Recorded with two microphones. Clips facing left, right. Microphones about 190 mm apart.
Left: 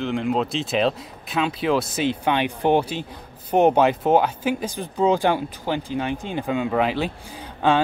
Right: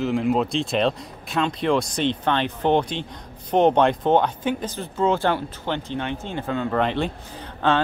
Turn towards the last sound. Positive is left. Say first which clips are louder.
# left 1 dB
turn(degrees=10)  # may be behind; listen again after turning